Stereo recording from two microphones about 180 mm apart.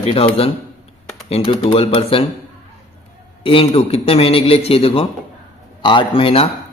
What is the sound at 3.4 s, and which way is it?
A man's voice, 30° left (ahead or behind).